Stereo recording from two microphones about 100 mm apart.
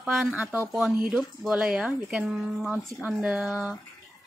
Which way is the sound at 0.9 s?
5° right (ahead or behind).